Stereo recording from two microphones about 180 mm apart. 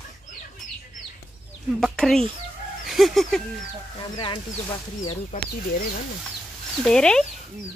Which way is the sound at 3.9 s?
25° left (ahead or behind).